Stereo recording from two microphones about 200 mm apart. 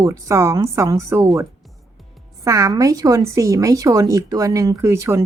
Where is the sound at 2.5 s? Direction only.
15° right (ahead or behind).